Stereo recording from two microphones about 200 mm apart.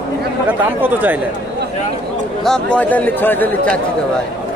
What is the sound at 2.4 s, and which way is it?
Speech, 5° left (ahead or behind).